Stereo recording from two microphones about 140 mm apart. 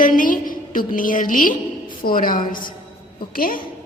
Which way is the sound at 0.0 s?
75° left (ahead or behind).